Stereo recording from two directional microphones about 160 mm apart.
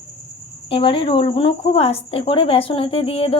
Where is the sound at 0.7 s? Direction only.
30° left (ahead or behind).